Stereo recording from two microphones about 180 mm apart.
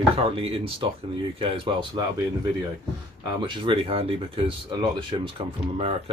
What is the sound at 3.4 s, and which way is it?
Speech, 25° right (ahead or behind).